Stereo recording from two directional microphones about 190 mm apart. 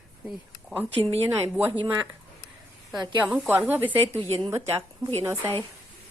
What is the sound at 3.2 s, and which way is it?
A woman's voice, 5° right (ahead or behind).